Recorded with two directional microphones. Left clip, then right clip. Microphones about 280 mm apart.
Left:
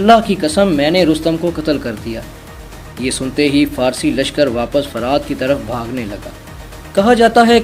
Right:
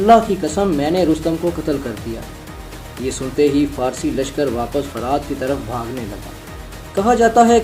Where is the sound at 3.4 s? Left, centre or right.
Left.